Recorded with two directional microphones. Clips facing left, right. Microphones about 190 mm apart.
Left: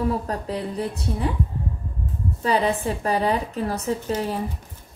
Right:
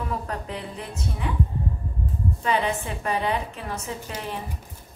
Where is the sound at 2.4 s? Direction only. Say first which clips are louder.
Left 4 dB; 35° left (ahead or behind).